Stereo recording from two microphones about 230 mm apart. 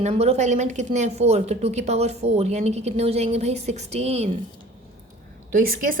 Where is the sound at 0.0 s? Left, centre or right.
Right.